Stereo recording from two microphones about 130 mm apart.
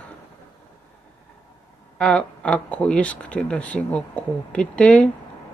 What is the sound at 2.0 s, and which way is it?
Speech, 10° left (ahead or behind).